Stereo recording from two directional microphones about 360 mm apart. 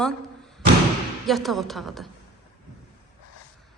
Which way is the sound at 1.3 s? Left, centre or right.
Centre.